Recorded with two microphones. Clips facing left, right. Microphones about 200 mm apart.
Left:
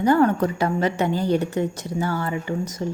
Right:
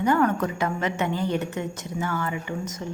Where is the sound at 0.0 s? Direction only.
30° left (ahead or behind).